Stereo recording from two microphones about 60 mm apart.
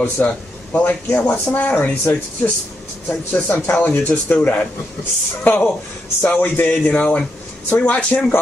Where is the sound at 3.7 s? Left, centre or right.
Left.